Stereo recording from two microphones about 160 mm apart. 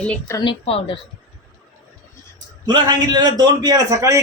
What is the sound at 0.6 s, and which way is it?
Speech, 35° left (ahead or behind).